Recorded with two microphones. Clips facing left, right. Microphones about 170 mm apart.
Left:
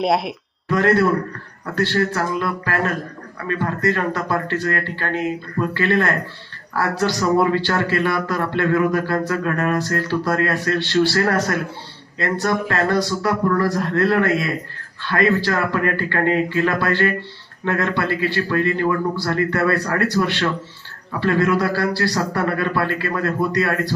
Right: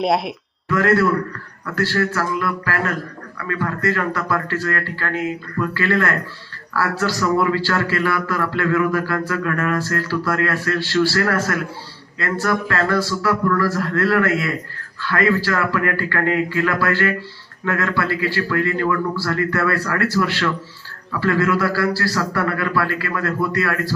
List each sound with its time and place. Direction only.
0.0 s speech: centre (ahead or behind)
0.7 s a man's voice: 25° left (ahead or behind)